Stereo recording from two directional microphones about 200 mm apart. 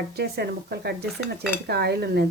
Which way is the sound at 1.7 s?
55° right (ahead or behind).